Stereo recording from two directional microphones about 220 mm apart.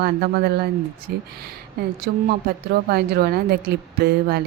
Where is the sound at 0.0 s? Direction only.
45° right (ahead or behind).